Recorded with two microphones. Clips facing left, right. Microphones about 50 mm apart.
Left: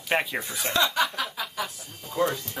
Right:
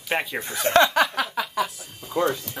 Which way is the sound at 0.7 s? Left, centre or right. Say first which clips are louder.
Right 6 dB; right.